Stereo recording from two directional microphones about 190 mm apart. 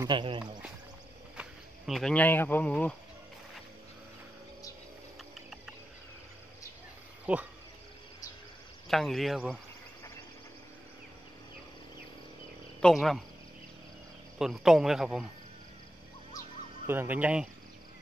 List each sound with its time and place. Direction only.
0.0 s speech: 25° right (ahead or behind)
1.3 s speech: 5° right (ahead or behind)
7.3 s speech: 5° right (ahead or behind)
8.8 s speech: centre (ahead or behind)
12.8 s speech: centre (ahead or behind)
14.4 s speech: 5° right (ahead or behind)
16.8 s speech: 10° right (ahead or behind)